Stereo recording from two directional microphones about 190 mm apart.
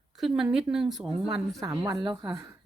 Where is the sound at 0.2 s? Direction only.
Centre (ahead or behind).